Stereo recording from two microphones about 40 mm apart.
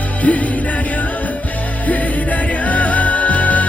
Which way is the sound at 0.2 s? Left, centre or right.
Left.